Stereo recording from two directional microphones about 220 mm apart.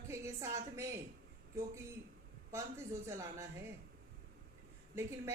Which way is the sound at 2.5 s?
15° right (ahead or behind).